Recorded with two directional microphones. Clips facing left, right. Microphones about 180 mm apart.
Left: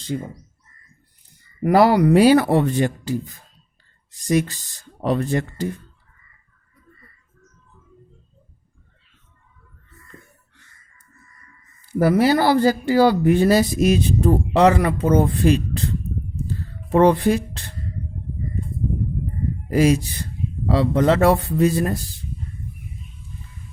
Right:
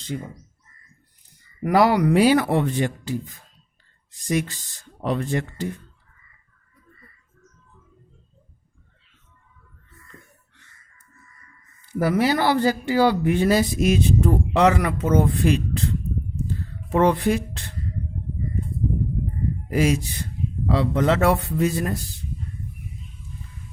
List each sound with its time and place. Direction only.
0.1 s speech: 35° left (ahead or behind)
1.6 s speech: 35° left (ahead or behind)
11.9 s speech: 40° left (ahead or behind)
16.9 s speech: 35° left (ahead or behind)
19.7 s speech: 35° left (ahead or behind)